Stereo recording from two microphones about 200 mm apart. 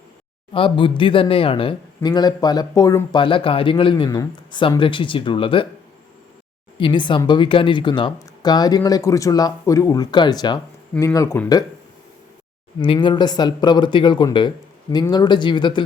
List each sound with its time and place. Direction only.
0.5 s speech: 25° left (ahead or behind)
6.7 s speech: 25° left (ahead or behind)
12.8 s speech: 25° left (ahead or behind)